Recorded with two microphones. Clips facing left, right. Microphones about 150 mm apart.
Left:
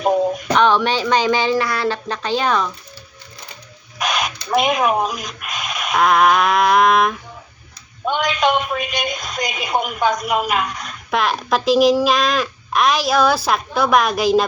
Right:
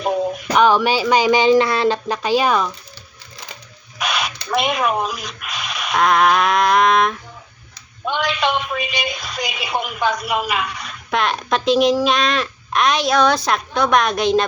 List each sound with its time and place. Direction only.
0.0 s speech: 5° right (ahead or behind)
4.0 s crow: 45° left (ahead or behind)
4.5 s speech: centre (ahead or behind)
8.2 s a woman's voice: centre (ahead or behind)
9.6 s a woman's voice: 45° left (ahead or behind)
9.8 s a woman's voice: centre (ahead or behind)